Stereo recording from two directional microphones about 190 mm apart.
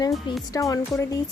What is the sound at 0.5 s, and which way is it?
Speech, 20° left (ahead or behind).